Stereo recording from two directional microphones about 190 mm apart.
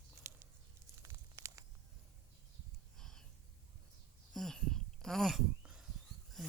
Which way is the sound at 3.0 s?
5° left (ahead or behind).